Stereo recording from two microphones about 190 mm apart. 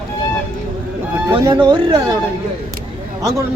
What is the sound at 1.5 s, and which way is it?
Speech, 25° right (ahead or behind).